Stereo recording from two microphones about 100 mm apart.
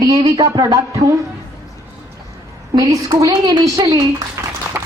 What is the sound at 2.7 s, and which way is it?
A woman's voice, 35° right (ahead or behind).